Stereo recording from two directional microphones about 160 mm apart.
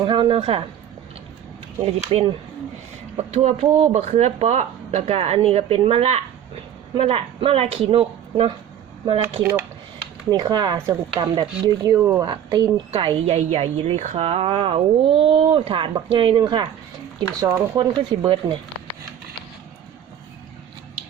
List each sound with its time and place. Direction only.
0.0 s a man's voice: 30° right (ahead or behind)
1.8 s speech: 35° right (ahead or behind)
10.2 s speech: 25° right (ahead or behind)
12.2 s speech: 25° right (ahead or behind)